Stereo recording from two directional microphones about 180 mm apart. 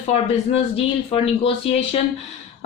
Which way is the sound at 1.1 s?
30° left (ahead or behind).